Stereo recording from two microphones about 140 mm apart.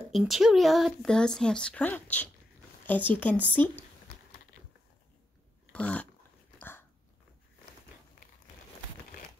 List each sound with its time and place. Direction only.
0.1 s speech: centre (ahead or behind); by 3.8 s 15° left (ahead or behind)
5.7 s dog: 10° left (ahead or behind)